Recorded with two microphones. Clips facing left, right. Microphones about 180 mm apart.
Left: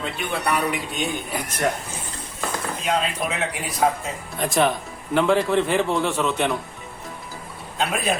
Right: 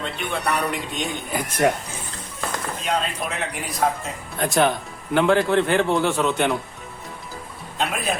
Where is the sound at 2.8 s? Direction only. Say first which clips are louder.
Left 2 dB; centre (ahead or behind).